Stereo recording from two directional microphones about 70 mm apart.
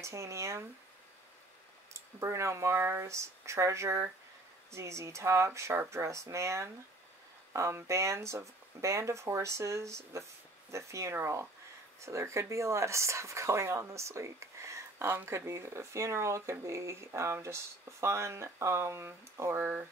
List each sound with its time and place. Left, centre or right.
0.0 s speech: right
2.0 s speech: right